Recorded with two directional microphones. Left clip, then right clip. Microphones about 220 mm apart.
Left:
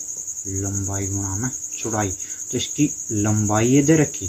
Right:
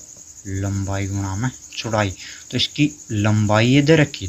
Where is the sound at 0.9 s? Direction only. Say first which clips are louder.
Even; 45° right (ahead or behind).